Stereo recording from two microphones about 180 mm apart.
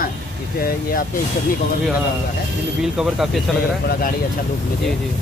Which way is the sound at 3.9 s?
55° left (ahead or behind).